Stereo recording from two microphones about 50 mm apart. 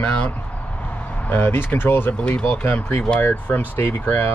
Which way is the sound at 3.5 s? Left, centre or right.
Left.